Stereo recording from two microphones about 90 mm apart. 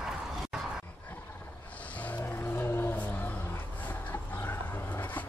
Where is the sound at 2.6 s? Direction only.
25° left (ahead or behind).